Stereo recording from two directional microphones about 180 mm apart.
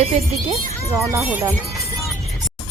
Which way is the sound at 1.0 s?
15° right (ahead or behind).